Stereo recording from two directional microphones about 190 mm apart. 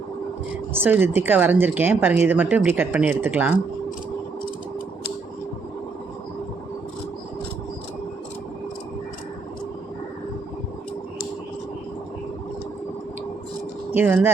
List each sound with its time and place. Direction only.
0.7 s speech: 10° right (ahead or behind)
13.9 s speech: 10° right (ahead or behind)